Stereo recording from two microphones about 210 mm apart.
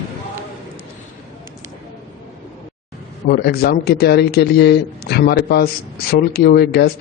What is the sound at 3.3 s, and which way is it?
A man's voice, 50° left (ahead or behind).